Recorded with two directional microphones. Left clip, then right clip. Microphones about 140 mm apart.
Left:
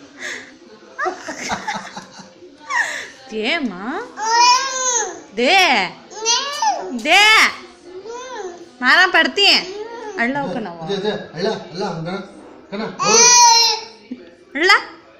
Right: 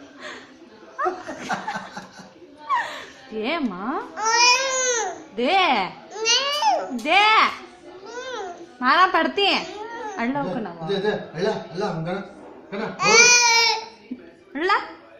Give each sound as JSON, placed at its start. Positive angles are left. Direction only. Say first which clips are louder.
{"t": 0.9, "sound": "laughter", "louder": "left 3 dB", "side_deg": -5}
{"t": 2.7, "sound": "music", "louder": "left 4 dB", "side_deg": -5}
{"t": 4.2, "sound": "baby cry", "louder": "left 4 dB", "side_deg": -10}
{"t": 5.3, "sound": "a child's voice", "louder": "left 6 dB", "side_deg": 10}
{"t": 6.1, "sound": "babbling", "louder": "left 1 dB", "side_deg": -15}
{"t": 7.0, "sound": "a child's voice", "louder": "left 6 dB", "side_deg": 0}
{"t": 8.1, "sound": "babbling", "louder": "left 2 dB", "side_deg": -5}
{"t": 10.1, "sound": "a child's voice", "louder": "left 6 dB", "side_deg": -5}
{"t": 10.9, "sound": "a man's voice", "louder": "left 1 dB", "side_deg": -20}
{"t": 14.5, "sound": "a sound", "louder": "left 8 dB", "side_deg": 10}